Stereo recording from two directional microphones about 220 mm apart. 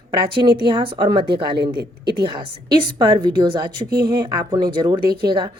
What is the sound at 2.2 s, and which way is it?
A woman's voice, 20° right (ahead or behind).